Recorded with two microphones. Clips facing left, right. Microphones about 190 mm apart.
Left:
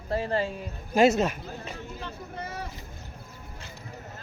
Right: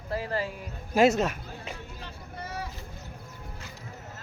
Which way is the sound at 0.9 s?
Centre (ahead or behind).